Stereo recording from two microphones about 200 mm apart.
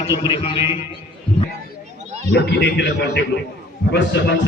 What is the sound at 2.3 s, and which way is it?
A man's voice, 60° left (ahead or behind).